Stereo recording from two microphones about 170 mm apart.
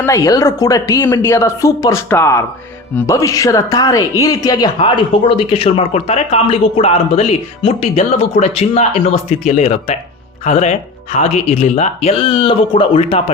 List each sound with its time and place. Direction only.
0.0 s speech: 20° left (ahead or behind)